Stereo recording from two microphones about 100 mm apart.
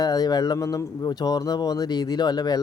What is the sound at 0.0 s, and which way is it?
Speech, 40° left (ahead or behind).